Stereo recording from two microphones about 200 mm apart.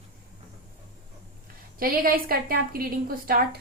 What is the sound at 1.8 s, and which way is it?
A woman's voice, 45° right (ahead or behind).